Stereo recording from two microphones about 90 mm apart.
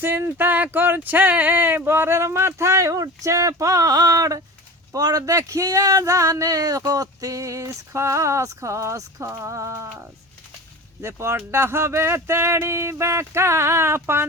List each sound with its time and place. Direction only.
0.0 s speech: 25° right (ahead or behind)